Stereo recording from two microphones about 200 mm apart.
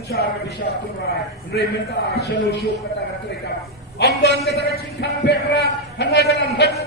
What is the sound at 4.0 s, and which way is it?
A woman's voice, 55° left (ahead or behind).